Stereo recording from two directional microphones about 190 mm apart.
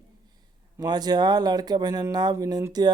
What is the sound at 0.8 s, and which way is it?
Speech, 20° right (ahead or behind).